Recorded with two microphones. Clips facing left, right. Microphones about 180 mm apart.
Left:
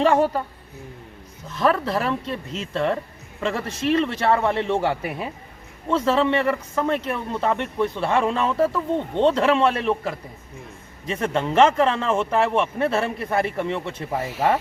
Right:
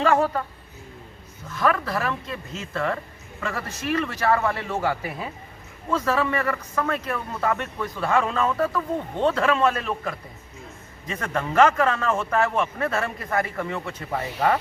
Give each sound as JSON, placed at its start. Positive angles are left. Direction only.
{"t": 0.0, "sound": "speech", "side_deg": 30}
{"t": 1.5, "sound": "speech", "side_deg": 25}